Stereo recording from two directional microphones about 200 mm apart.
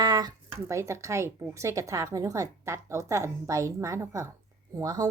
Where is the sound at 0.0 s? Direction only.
20° right (ahead or behind).